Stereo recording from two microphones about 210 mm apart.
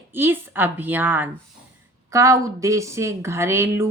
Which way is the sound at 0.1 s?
10° right (ahead or behind).